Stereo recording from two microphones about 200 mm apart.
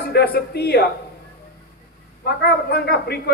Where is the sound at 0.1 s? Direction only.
55° left (ahead or behind).